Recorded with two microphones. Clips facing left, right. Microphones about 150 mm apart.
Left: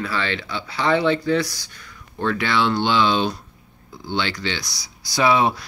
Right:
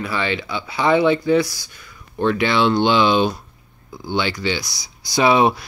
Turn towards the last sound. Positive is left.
turn(degrees=-20)  # may be behind; listen again after turning